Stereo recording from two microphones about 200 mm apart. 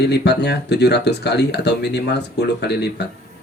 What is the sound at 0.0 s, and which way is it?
Speech, 55° left (ahead or behind).